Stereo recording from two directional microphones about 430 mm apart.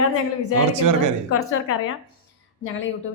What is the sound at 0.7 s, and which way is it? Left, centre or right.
Speech, right.